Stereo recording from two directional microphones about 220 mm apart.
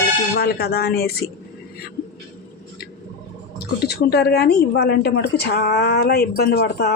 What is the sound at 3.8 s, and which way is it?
A woman's voice, 45° left (ahead or behind).